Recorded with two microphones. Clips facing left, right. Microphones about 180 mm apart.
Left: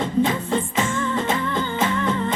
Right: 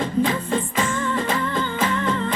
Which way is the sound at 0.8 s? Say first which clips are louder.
Even; 25° left (ahead or behind).